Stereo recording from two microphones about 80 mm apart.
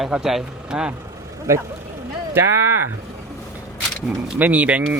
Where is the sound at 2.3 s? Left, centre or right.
Right.